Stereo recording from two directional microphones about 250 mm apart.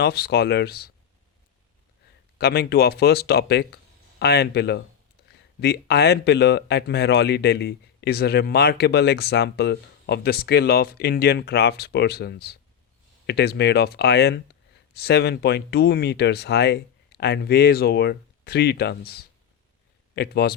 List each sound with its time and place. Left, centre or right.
0.0 s speech: left
2.4 s speech: left